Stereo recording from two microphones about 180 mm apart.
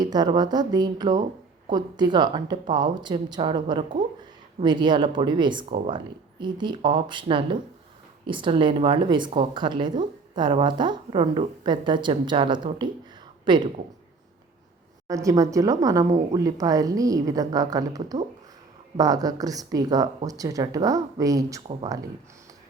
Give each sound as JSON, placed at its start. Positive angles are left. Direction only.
{"t": 0.0, "sound": "speech", "side_deg": -25}
{"t": 5.6, "sound": "speech", "side_deg": -40}
{"t": 6.4, "sound": "speech", "side_deg": -25}
{"t": 15.0, "sound": "speech", "side_deg": -20}